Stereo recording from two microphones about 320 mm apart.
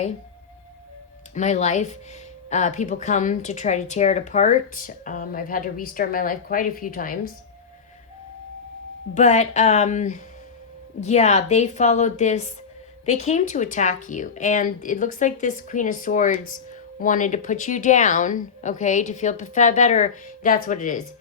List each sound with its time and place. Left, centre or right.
1.3 s speech: left
9.1 s speech: left